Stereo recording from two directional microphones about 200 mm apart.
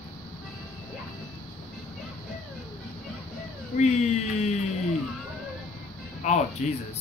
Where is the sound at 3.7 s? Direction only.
30° left (ahead or behind).